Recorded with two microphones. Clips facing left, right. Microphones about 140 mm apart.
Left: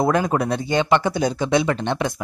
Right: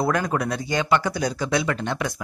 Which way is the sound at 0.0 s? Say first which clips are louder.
Left 4 dB; 20° left (ahead or behind).